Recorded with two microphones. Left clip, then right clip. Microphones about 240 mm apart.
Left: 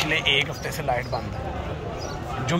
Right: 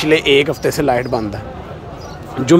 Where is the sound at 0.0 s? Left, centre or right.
Right.